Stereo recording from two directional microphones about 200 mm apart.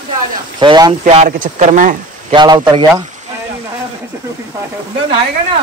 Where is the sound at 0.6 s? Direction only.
20° right (ahead or behind).